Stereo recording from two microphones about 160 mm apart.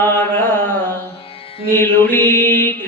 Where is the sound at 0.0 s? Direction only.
10° left (ahead or behind).